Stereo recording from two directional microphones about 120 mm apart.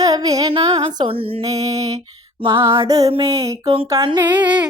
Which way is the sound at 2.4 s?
50° right (ahead or behind).